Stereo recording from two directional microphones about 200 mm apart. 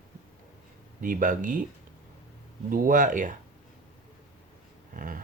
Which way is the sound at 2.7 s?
45° right (ahead or behind).